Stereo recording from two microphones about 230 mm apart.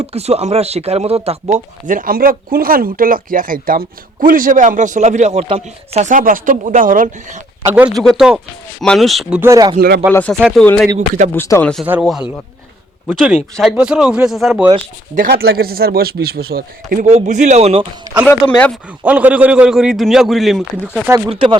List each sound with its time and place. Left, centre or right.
0.0 s speech: right
7.8 s a man's voice: centre
9.7 s speech: right
10.1 s a man's voice: centre
15.1 s speech: right; by 18.3 s centre
18.5 s a man's voice: centre
21.2 s speech: right